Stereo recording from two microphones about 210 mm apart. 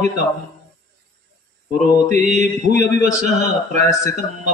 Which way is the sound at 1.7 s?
35° right (ahead or behind).